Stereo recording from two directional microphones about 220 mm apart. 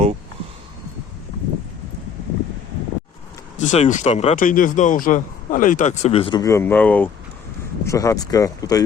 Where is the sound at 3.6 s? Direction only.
30° left (ahead or behind).